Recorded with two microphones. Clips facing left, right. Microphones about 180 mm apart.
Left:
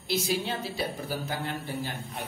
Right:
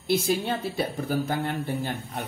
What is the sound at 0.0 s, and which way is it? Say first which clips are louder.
Speech: right 5 dB; 55° right (ahead or behind).